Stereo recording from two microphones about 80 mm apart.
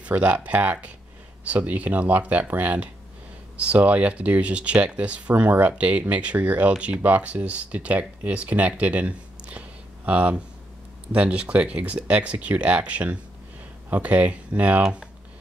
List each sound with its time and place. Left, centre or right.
0.0 s speech: centre